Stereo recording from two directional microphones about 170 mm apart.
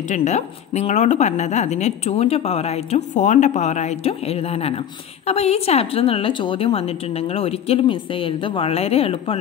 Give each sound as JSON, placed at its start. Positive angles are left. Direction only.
{"t": 0.1, "sound": "speech", "side_deg": 40}